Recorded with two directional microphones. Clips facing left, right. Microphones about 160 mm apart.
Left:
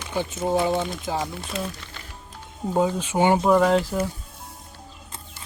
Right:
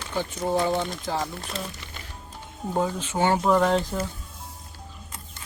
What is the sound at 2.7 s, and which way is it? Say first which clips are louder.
Speech: left 4 dB; 15° left (ahead or behind).